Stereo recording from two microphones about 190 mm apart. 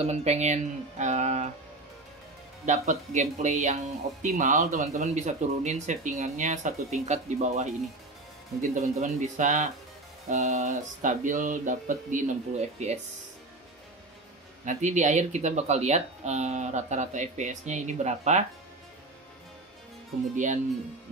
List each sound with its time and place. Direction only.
0.0 s speech: 35° right (ahead or behind)
2.6 s speech: 40° right (ahead or behind)
14.6 s speech: 40° right (ahead or behind)